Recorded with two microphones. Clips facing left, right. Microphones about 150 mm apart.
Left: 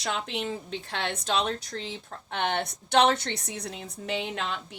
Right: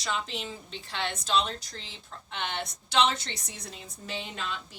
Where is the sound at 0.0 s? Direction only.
55° left (ahead or behind).